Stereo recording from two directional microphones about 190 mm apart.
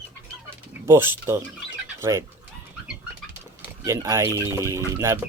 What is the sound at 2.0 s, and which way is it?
Speech, 15° right (ahead or behind).